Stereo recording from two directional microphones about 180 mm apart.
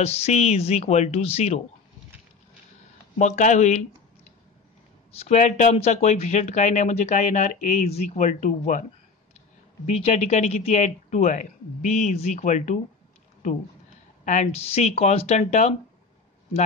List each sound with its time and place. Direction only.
0.0 s speech: 35° left (ahead or behind)
3.2 s speech: 40° left (ahead or behind)
5.2 s speech: 40° left (ahead or behind)
9.8 s speech: 40° left (ahead or behind)
14.2 s speech: 40° left (ahead or behind)